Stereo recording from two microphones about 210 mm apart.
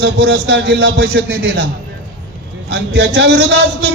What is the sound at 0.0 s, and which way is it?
A man's voice, 50° right (ahead or behind).